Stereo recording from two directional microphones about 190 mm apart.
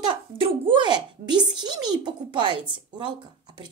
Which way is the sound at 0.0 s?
25° right (ahead or behind).